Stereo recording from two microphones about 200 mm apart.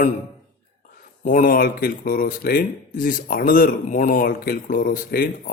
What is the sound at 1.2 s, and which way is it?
Speech, 40° left (ahead or behind).